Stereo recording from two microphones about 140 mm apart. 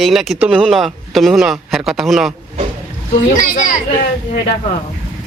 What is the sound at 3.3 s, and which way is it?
Speech, 70° left (ahead or behind).